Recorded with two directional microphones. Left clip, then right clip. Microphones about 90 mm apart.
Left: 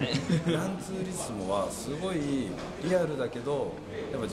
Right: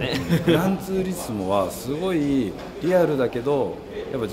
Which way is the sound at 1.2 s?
15° left (ahead or behind).